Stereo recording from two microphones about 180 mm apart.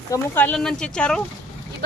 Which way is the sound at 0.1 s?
10° left (ahead or behind).